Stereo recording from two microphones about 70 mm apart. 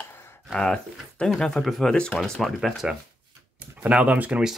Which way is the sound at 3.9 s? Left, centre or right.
Centre.